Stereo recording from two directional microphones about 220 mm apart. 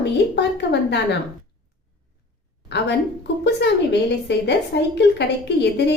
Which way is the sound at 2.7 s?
50° left (ahead or behind).